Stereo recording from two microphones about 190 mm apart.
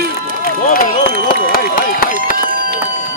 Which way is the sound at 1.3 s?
50° left (ahead or behind).